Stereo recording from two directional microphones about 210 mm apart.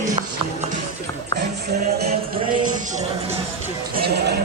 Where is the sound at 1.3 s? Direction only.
50° right (ahead or behind).